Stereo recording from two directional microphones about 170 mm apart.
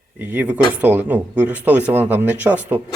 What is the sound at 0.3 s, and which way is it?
Speech, 10° right (ahead or behind).